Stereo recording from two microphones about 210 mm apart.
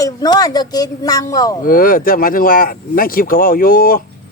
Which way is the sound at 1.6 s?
40° left (ahead or behind).